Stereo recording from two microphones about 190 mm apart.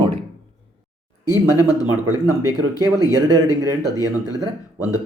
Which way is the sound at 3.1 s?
15° right (ahead or behind).